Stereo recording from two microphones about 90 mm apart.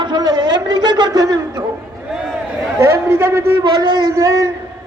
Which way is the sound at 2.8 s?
30° right (ahead or behind).